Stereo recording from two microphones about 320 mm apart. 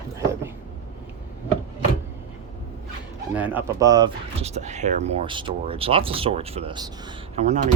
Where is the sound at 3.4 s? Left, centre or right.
Centre.